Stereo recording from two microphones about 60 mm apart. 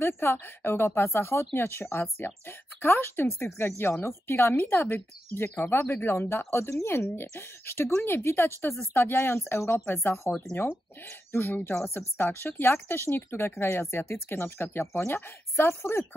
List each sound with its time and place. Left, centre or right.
0.0 s speech: left
4.6 s speech: left
6.1 s speech: left
7.2 s speech: left
11.3 s speech: left